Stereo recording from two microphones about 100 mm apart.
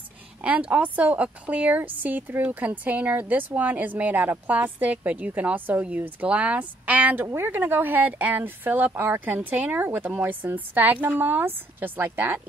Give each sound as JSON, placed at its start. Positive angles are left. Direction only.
{"t": 0.4, "sound": "a woman's voice", "side_deg": -15}